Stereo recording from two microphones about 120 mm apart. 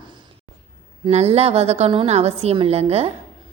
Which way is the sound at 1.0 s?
60° right (ahead or behind).